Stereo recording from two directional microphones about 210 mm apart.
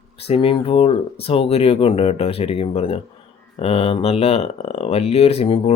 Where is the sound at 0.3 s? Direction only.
25° left (ahead or behind).